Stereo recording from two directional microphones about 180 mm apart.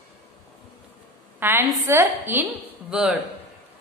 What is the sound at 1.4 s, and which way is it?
A woman's voice, 10° right (ahead or behind).